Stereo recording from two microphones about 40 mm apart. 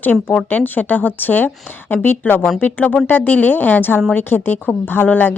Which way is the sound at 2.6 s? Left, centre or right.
Left.